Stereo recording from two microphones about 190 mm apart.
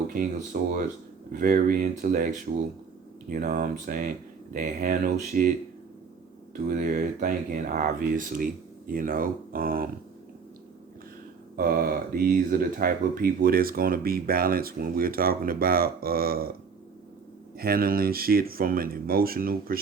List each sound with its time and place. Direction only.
0.1 s speech: 45° right (ahead or behind)
6.7 s speech: 45° right (ahead or behind)
11.5 s speech: 50° right (ahead or behind)
17.6 s speech: 50° right (ahead or behind)